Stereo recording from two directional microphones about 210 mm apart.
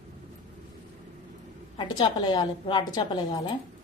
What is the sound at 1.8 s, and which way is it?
A woman's voice, 20° left (ahead or behind).